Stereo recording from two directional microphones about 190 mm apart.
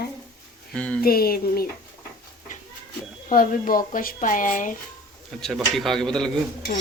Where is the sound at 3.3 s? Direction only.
50° left (ahead or behind).